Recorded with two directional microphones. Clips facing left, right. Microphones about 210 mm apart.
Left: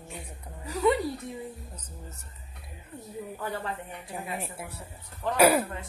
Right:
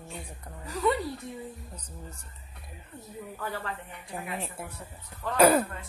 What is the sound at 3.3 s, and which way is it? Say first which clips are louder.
A woman's voice: left 1 dB; 15° left (ahead or behind).